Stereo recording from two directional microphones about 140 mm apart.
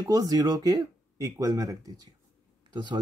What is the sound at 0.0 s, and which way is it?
Speech, 25° right (ahead or behind).